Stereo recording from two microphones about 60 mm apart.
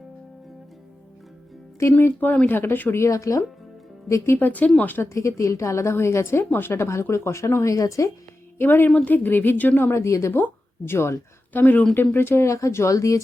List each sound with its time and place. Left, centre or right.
1.9 s a woman's voice: left
2.9 s speech: left
4.4 s a woman's voice: left
5.0 s a woman's voice: left
7.7 s speech: left
8.5 s a woman's voice: left
9.8 s speech: left
10.3 s a woman's voice: left
11.5 s a woman's voice: left
11.9 s speech: left